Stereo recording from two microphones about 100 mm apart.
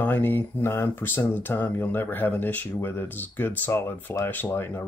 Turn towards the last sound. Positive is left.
turn(degrees=20)  # may be behind; listen again after turning